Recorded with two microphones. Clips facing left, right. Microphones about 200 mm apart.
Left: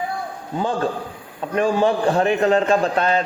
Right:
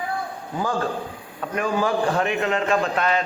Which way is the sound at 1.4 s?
30° left (ahead or behind).